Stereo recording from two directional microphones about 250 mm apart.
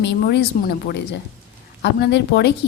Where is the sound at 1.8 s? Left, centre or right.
Left.